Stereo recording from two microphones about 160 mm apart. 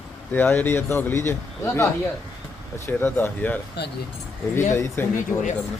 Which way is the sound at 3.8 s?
90° left.